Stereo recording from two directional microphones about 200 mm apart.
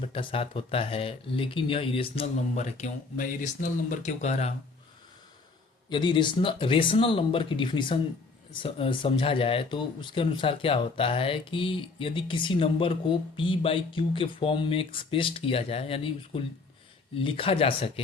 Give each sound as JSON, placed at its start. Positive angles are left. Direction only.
{"t": 0.0, "sound": "speech", "side_deg": 25}
{"t": 5.9, "sound": "speech", "side_deg": 25}